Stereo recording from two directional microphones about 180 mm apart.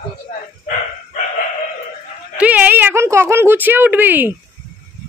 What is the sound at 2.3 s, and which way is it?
Speech, 10° right (ahead or behind).